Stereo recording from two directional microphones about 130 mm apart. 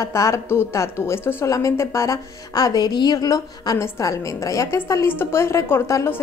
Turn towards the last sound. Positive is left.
turn(degrees=20)  # may be behind; listen again after turning